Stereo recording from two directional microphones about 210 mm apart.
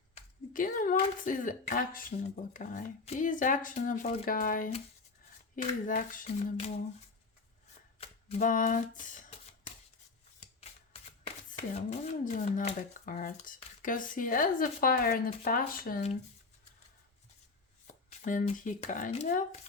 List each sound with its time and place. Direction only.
0.1 s a sound: 40° left (ahead or behind)
0.9 s speech: 35° left (ahead or behind)
7.9 s speech: 30° left (ahead or behind)
11.2 s speech: 30° left (ahead or behind)
17.8 s speech: 35° left (ahead or behind)